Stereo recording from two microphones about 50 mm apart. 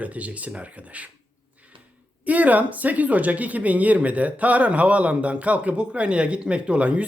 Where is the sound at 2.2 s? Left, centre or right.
Right.